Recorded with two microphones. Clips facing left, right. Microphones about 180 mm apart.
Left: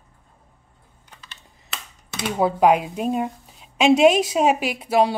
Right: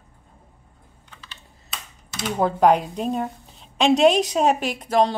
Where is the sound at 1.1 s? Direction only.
45° left (ahead or behind).